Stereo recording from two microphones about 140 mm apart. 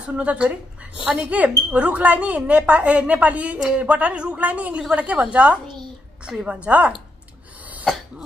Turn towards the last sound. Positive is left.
turn(degrees=-10)  # may be behind; listen again after turning